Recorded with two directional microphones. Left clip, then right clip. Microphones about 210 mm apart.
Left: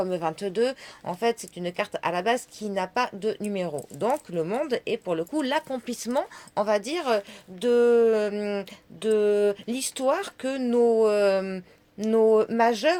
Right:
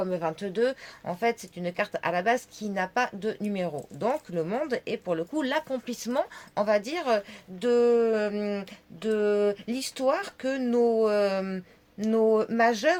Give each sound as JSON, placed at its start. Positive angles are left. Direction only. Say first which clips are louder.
{"t": 0.0, "sound": "speech", "louder": "left 2 dB", "side_deg": 35}